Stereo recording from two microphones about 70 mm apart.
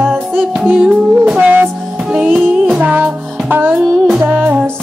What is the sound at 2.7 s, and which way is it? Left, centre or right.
Music, right.